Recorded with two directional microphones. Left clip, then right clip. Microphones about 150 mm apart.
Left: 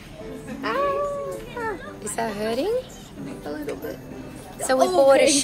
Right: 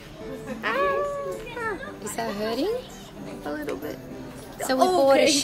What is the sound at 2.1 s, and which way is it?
Speech, 5° right (ahead or behind).